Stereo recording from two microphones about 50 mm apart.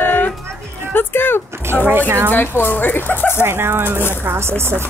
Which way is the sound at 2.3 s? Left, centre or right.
Left.